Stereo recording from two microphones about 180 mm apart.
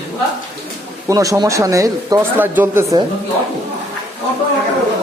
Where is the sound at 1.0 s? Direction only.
20° right (ahead or behind).